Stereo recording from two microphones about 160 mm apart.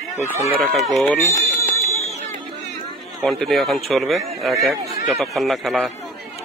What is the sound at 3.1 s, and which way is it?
A man's voice, centre (ahead or behind).